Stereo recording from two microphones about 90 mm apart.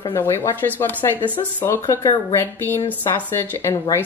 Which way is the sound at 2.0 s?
50° left (ahead or behind).